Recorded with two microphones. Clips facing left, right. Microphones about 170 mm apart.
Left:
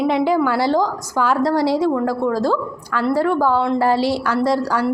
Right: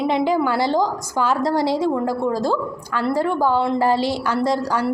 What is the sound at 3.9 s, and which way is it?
Speech, 5° left (ahead or behind).